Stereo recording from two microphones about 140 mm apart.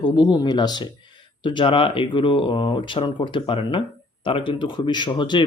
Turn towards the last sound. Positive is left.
turn(degrees=35)  # may be behind; listen again after turning